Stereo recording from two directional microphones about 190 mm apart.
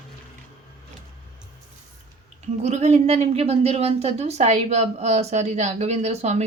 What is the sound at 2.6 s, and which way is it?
A woman's voice, 35° right (ahead or behind).